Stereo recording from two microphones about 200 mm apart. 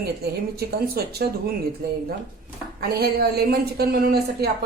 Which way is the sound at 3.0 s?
50° right (ahead or behind).